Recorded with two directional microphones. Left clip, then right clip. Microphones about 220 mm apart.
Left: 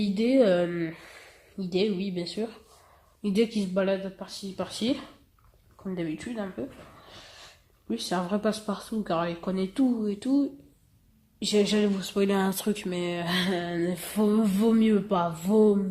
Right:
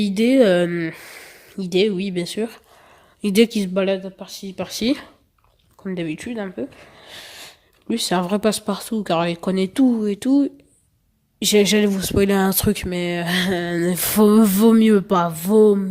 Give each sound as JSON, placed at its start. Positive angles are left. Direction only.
{"t": 0.0, "sound": "speech", "side_deg": -45}